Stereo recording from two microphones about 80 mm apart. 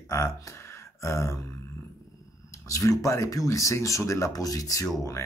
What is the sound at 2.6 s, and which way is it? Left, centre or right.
Speech, left.